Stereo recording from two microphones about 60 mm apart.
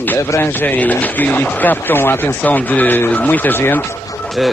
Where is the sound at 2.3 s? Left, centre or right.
Left.